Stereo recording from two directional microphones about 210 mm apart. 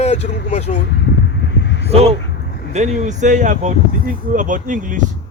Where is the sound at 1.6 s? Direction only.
55° left (ahead or behind).